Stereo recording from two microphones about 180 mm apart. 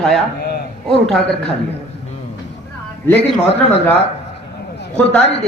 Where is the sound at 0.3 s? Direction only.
60° left (ahead or behind).